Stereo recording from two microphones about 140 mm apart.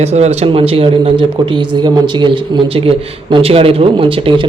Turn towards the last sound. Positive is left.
turn(degrees=-40)  # may be behind; listen again after turning